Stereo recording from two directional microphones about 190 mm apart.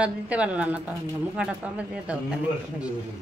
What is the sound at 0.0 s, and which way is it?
Speech, 5° right (ahead or behind).